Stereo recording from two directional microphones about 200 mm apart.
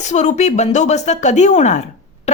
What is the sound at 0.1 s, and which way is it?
Speech, 35° left (ahead or behind).